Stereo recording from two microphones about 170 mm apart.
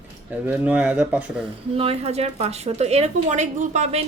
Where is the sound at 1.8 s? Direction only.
35° right (ahead or behind).